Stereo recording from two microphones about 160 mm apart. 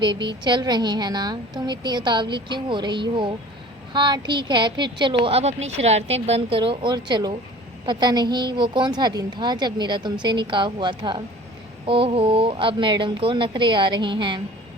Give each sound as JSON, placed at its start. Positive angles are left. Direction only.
{"t": 0.3, "sound": "a woman's voice", "side_deg": -30}